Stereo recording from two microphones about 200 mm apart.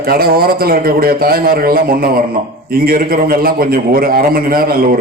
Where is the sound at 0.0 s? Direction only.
50° right (ahead or behind).